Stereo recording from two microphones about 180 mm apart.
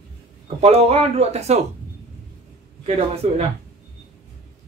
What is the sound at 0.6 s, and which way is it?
Speech, 35° right (ahead or behind).